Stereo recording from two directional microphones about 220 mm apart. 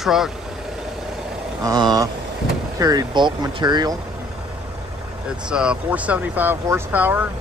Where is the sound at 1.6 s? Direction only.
15° right (ahead or behind).